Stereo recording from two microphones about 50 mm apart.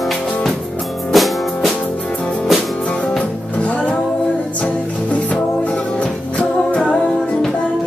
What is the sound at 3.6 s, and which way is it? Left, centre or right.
Music, left.